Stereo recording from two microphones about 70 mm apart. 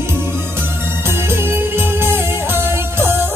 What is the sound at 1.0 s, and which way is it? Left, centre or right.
Music, right.